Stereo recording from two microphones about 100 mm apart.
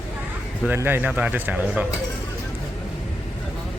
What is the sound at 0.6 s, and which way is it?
A man's voice, 20° right (ahead or behind).